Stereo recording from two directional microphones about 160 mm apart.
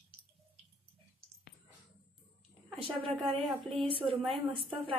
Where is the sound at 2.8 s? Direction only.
35° right (ahead or behind).